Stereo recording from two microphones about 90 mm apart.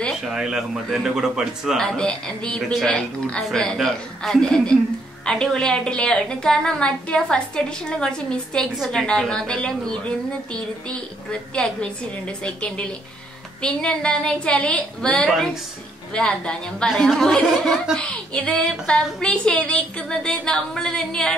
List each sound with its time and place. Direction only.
0.1 s a woman's voice: 5° right (ahead or behind)
1.8 s a woman's voice: 10° left (ahead or behind)
9.0 s a woman's voice: 10° left (ahead or behind)
17.9 s a woman's voice: 10° left (ahead or behind)